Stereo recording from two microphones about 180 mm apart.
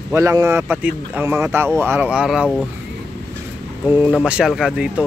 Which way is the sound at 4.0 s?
5° right (ahead or behind).